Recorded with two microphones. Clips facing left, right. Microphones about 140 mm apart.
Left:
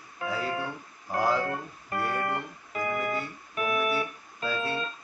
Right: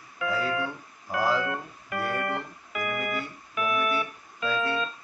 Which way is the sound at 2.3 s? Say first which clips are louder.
Even; 30° left (ahead or behind).